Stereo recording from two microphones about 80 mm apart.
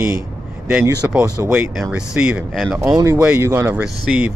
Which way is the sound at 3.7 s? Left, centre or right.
Centre.